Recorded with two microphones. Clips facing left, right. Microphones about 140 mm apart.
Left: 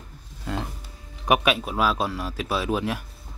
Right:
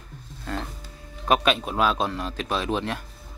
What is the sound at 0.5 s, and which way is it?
Music, 15° left (ahead or behind).